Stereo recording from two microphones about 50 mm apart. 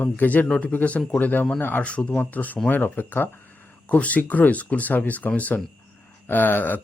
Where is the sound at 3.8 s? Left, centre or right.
Left.